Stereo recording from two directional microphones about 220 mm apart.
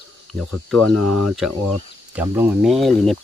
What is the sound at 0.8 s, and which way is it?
Speech, 90° right.